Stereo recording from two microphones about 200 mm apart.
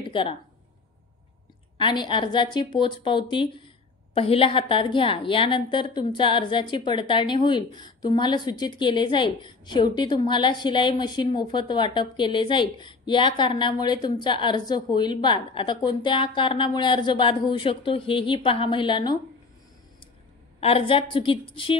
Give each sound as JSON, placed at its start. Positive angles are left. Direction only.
{"t": 0.0, "sound": "a sound", "side_deg": 25}
{"t": 1.8, "sound": "a woman's voice", "side_deg": 25}
{"t": 20.6, "sound": "a woman's voice", "side_deg": 30}